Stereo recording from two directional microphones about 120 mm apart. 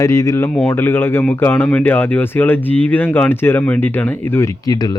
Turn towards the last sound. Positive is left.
turn(degrees=30)  # may be behind; listen again after turning